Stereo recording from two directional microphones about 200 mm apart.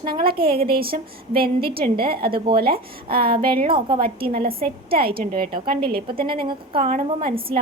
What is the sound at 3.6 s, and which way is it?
Speech, 25° right (ahead or behind).